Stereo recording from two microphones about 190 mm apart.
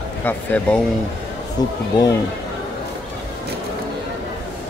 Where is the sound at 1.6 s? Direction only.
20° left (ahead or behind).